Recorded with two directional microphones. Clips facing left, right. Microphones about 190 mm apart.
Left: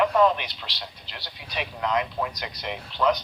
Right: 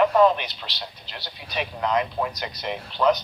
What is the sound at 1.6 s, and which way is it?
Speech, 40° right (ahead or behind).